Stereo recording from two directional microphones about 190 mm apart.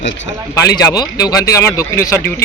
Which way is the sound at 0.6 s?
20° left (ahead or behind).